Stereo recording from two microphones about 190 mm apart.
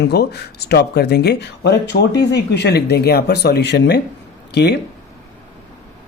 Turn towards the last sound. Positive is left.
turn(degrees=60)  # may be behind; listen again after turning